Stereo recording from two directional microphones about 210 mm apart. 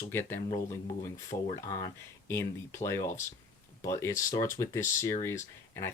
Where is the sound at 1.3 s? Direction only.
30° left (ahead or behind).